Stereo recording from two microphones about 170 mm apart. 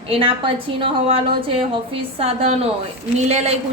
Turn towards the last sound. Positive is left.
turn(degrees=-40)  # may be behind; listen again after turning